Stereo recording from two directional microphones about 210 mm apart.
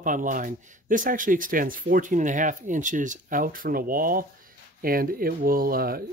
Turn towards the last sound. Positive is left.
turn(degrees=-45)  # may be behind; listen again after turning